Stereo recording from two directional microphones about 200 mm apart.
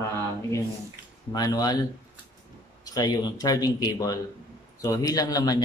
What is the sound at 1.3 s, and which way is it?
Speech, 20° left (ahead or behind).